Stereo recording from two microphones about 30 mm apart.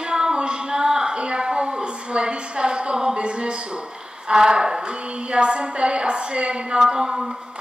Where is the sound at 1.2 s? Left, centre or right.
Right.